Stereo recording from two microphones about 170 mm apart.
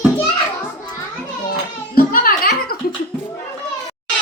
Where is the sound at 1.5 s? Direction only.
60° left (ahead or behind).